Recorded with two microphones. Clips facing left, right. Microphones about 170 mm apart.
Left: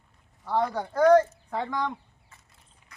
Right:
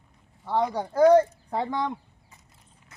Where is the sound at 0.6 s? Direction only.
15° right (ahead or behind).